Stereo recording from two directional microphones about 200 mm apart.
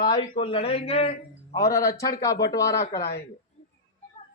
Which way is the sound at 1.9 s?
15° left (ahead or behind).